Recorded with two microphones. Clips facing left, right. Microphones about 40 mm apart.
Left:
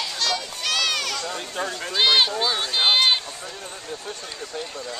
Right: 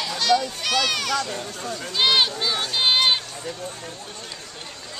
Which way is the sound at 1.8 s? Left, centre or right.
Centre.